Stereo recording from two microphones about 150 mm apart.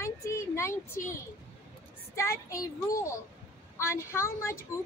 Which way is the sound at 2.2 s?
20° left (ahead or behind).